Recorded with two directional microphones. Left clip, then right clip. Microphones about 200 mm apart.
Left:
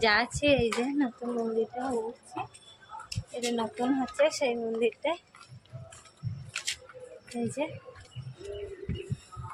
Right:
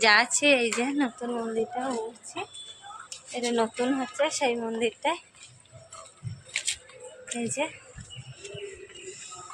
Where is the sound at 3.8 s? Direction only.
Centre (ahead or behind).